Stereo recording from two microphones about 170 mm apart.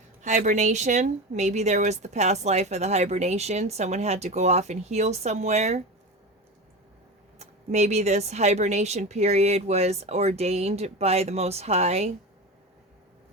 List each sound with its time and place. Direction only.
0.2 s speech: 45° right (ahead or behind)
7.3 s speech: 40° right (ahead or behind)